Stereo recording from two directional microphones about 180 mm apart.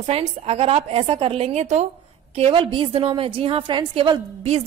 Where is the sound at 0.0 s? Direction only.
35° right (ahead or behind).